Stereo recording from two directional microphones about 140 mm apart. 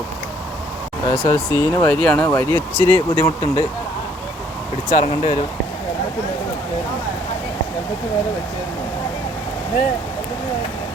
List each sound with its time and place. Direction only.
1.0 s speech: 15° left (ahead or behind)
4.9 s speech: 25° left (ahead or behind)